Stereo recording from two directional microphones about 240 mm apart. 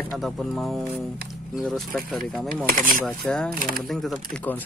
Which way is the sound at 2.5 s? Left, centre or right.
Right.